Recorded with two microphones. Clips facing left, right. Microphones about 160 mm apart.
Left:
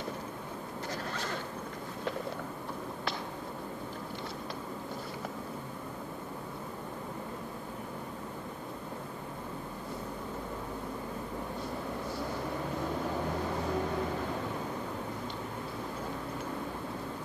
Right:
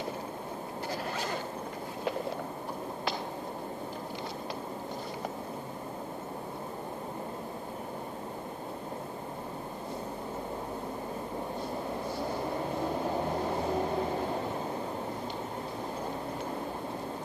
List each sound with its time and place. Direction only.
13.0 s vehicle: 30° right (ahead or behind)